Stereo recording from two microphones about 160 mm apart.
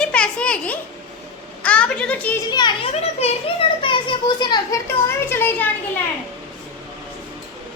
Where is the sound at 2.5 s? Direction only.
25° left (ahead or behind).